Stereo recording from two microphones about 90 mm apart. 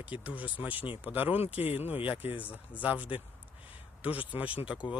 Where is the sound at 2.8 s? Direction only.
15° right (ahead or behind).